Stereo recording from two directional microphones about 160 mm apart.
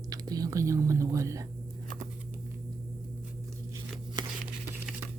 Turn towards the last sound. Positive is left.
turn(degrees=-30)  # may be behind; listen again after turning